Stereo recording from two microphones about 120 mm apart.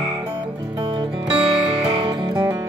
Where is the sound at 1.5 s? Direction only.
5° right (ahead or behind).